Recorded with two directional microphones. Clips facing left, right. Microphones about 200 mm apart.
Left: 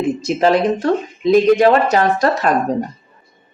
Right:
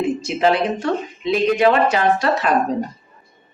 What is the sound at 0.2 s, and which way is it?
Speech, 40° left (ahead or behind).